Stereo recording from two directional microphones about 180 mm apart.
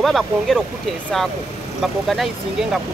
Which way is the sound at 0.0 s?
Centre (ahead or behind).